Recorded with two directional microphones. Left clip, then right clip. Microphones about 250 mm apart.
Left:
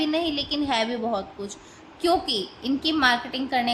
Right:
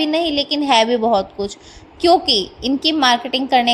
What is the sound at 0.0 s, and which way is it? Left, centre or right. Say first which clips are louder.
A woman's voice: right 7 dB; right.